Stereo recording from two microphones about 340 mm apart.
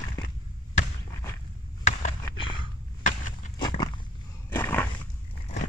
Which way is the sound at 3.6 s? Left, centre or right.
Centre.